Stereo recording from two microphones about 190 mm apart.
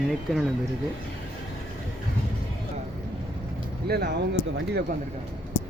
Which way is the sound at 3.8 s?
55° right (ahead or behind).